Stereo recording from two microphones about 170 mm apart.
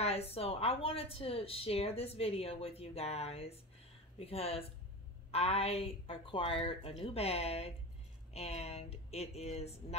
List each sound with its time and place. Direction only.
0.0 s speech: 35° left (ahead or behind)